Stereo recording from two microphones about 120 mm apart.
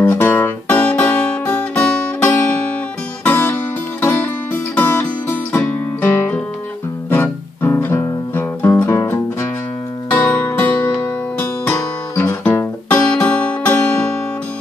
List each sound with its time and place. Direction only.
0.0 s music: 15° left (ahead or behind)
7.1 s guitar: 15° left (ahead or behind)
8.1 s music: 20° left (ahead or behind)
10.1 s music: 15° left (ahead or behind)
11.3 s guitar: 20° left (ahead or behind)